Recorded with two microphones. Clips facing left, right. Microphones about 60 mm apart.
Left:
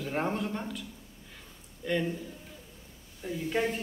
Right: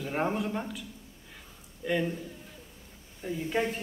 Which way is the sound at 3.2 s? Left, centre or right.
Centre.